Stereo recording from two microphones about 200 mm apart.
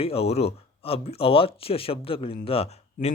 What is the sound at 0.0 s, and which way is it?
Speech, 30° left (ahead or behind).